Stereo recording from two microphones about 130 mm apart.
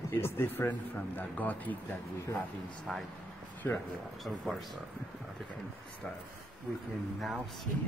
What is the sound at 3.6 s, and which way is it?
Speech, 15° left (ahead or behind).